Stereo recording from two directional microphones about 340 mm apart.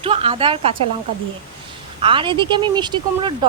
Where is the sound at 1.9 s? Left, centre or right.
Centre.